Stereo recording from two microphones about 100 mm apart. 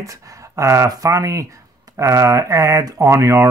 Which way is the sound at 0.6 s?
30° right (ahead or behind).